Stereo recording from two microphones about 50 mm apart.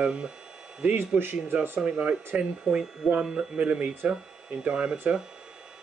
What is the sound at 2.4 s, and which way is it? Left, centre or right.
Speech, centre.